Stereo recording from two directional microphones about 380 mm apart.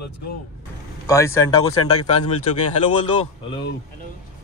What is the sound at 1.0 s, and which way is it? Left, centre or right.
Speech, centre.